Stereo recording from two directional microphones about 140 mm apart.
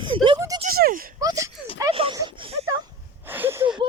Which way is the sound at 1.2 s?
25° right (ahead or behind).